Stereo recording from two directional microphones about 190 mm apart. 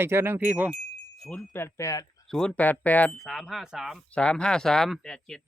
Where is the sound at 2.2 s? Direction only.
5° left (ahead or behind).